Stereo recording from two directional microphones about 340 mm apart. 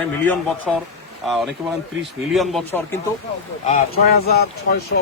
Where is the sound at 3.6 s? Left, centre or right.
Left.